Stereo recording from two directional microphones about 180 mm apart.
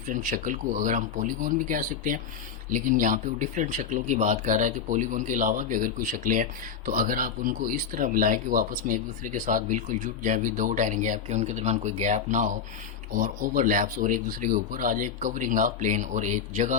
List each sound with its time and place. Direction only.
0.1 s speech: 45° right (ahead or behind)